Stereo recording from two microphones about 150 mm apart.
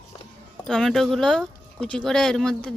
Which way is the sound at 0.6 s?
5° left (ahead or behind).